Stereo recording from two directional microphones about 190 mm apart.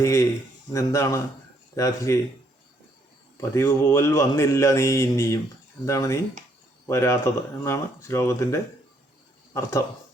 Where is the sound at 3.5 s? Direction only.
10° left (ahead or behind).